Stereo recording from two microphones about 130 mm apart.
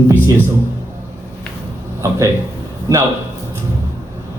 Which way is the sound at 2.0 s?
25° right (ahead or behind).